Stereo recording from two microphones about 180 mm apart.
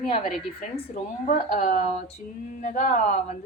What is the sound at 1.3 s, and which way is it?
A woman's voice, 40° left (ahead or behind).